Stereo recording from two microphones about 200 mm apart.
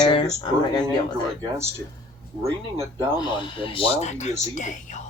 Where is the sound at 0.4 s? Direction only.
20° left (ahead or behind).